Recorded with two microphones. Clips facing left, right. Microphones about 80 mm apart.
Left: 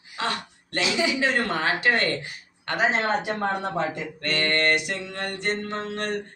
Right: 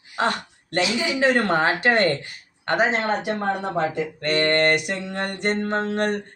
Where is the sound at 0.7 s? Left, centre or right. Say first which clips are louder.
Right 2 dB; right.